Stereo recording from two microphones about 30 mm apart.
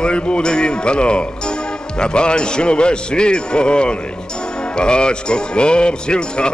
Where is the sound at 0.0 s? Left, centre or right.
Left.